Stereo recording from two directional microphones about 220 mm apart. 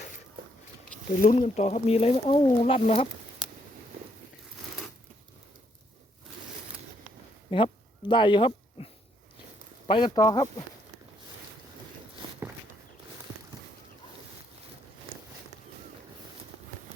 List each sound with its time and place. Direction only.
1.2 s speech: 35° left (ahead or behind)
7.5 s speech: 20° left (ahead or behind)